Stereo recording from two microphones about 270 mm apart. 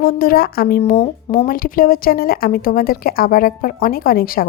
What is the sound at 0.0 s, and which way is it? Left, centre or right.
Speech, left.